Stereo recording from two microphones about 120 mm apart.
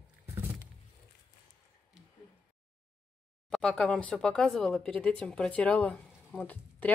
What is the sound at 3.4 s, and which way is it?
Speech, 5° left (ahead or behind).